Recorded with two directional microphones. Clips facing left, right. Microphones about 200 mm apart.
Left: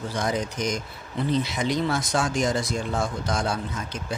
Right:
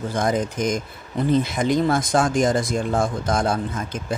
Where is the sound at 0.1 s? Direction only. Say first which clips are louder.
Right 5 dB; 50° right (ahead or behind).